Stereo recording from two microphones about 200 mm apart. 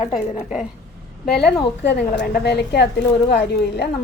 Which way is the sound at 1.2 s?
55° left (ahead or behind).